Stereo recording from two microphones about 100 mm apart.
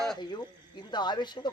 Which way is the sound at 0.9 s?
50° left (ahead or behind).